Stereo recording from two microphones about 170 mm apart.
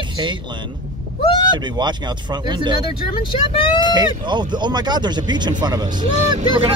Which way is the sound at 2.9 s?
30° left (ahead or behind).